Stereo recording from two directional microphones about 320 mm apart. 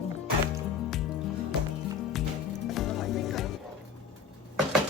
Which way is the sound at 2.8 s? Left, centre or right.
Centre.